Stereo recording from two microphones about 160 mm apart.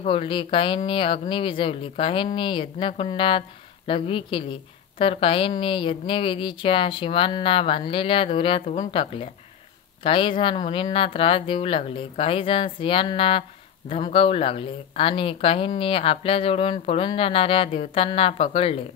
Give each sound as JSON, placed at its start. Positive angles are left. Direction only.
{"t": 0.0, "sound": "speech", "side_deg": 35}